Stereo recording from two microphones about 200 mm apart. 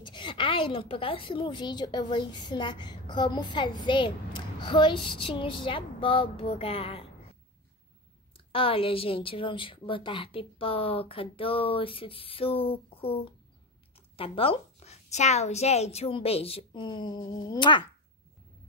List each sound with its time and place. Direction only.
0.0 s a woman's voice: 25° left (ahead or behind)
8.5 s a woman's voice: 25° left (ahead or behind)